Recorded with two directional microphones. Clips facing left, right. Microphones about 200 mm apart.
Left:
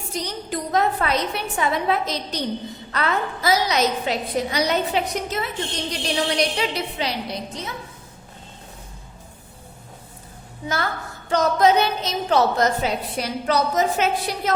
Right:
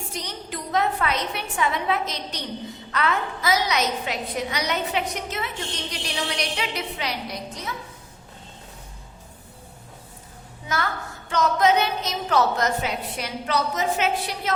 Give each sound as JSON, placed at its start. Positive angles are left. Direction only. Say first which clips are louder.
{"t": 0.1, "sound": "a woman's voice", "louder": "left 10 dB", "side_deg": 35}
{"t": 11.3, "sound": "a woman's voice", "louder": "left 3 dB", "side_deg": 35}